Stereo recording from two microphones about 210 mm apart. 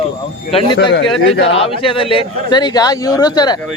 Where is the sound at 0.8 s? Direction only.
60° left (ahead or behind).